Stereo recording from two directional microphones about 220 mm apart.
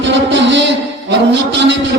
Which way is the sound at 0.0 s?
55° right (ahead or behind).